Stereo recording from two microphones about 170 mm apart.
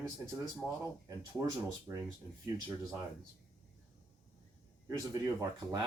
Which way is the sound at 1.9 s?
20° right (ahead or behind).